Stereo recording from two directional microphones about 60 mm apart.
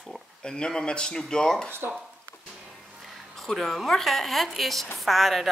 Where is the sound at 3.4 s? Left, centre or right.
Centre.